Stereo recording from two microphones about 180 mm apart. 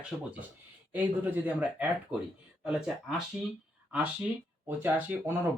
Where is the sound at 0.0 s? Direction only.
10° right (ahead or behind).